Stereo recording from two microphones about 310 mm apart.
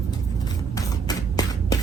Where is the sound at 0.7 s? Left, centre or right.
Centre.